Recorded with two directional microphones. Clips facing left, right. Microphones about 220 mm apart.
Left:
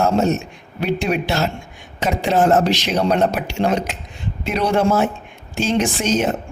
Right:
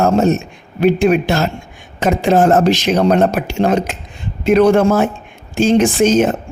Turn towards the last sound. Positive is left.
turn(degrees=-50)  # may be behind; listen again after turning